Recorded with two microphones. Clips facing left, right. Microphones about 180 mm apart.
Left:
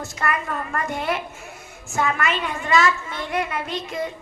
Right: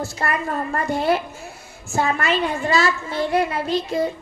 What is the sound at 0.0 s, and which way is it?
A woman's voice, 30° right (ahead or behind).